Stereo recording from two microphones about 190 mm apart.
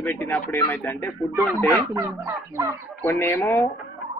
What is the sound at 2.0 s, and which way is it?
Speech, 15° right (ahead or behind).